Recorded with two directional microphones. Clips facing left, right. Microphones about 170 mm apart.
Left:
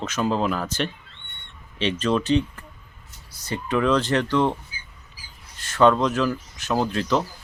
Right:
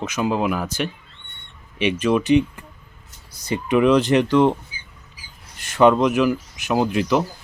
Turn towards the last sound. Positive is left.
turn(degrees=-15)  # may be behind; listen again after turning